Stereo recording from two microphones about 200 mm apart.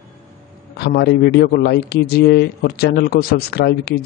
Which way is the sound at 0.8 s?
55° left (ahead or behind).